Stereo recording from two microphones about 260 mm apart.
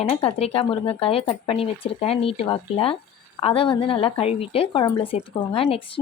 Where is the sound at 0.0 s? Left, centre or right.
Left.